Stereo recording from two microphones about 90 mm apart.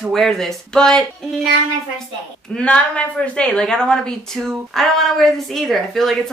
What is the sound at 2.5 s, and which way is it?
A woman's voice, 10° left (ahead or behind).